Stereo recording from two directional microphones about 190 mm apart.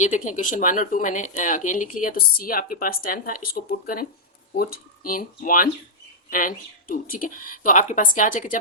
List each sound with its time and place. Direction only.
0.0 s speech: 40° left (ahead or behind)